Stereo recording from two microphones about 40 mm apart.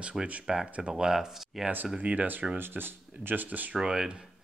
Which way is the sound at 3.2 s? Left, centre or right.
Right.